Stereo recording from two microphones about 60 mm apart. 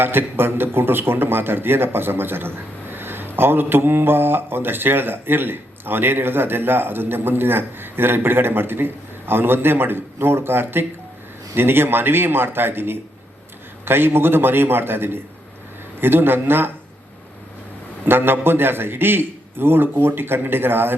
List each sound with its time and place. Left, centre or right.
0.0 s a man's voice: right
18.0 s a man's voice: right